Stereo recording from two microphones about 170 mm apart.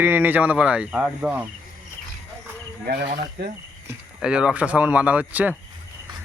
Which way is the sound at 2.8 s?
65° right (ahead or behind).